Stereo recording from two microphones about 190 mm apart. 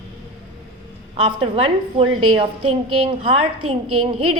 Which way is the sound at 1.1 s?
30° right (ahead or behind).